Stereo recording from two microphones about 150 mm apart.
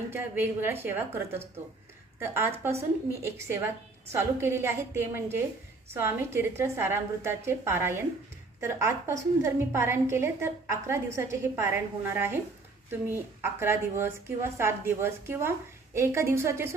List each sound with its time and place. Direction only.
0.1 s a woman's voice: 15° right (ahead or behind)